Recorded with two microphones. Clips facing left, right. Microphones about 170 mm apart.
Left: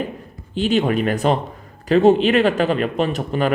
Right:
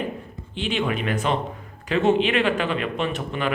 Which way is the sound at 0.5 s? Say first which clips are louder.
Left 7 dB; 40° left (ahead or behind).